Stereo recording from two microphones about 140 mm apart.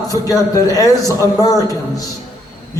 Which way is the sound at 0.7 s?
25° left (ahead or behind).